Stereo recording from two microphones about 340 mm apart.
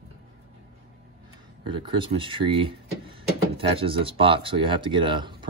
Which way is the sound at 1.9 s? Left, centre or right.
Centre.